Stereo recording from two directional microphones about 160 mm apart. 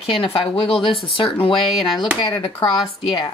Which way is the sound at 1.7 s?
Centre (ahead or behind).